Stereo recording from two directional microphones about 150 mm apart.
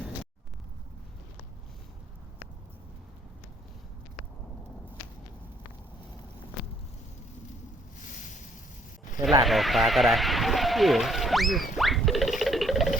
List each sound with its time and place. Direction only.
8.0 s boat: 60° left (ahead or behind)
9.4 s speech: centre (ahead or behind)
11.8 s music: centre (ahead or behind)